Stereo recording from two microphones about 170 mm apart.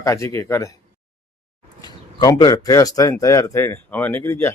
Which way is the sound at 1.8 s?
25° left (ahead or behind).